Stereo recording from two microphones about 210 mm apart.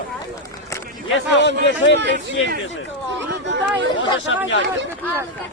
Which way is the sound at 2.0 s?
55° right (ahead or behind).